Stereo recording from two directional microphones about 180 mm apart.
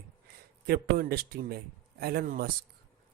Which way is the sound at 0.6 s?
60° right (ahead or behind).